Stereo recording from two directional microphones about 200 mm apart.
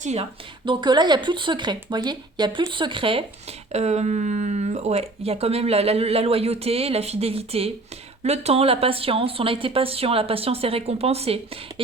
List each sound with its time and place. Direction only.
0.0 s speech: 30° right (ahead or behind)